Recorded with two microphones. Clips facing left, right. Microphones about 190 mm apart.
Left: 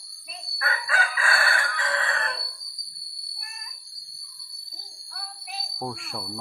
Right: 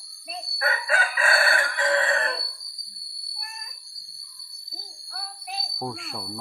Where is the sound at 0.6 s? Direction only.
25° right (ahead or behind).